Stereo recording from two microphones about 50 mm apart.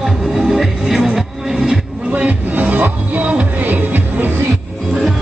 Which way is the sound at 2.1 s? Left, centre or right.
Right.